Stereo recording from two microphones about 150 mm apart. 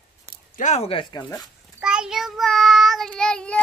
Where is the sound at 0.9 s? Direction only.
25° left (ahead or behind).